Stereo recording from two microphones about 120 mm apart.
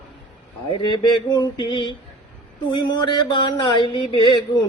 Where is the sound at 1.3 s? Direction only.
40° left (ahead or behind).